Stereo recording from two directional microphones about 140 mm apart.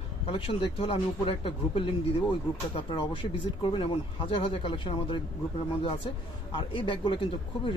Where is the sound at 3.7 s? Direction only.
40° left (ahead or behind).